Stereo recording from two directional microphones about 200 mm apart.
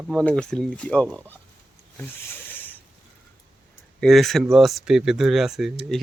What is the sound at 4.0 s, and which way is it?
Speech, centre (ahead or behind).